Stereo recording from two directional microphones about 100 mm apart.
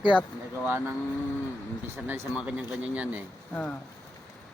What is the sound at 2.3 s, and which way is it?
Speech, 10° right (ahead or behind).